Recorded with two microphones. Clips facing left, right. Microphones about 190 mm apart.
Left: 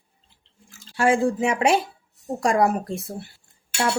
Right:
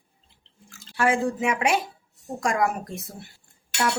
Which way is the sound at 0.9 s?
30° left (ahead or behind).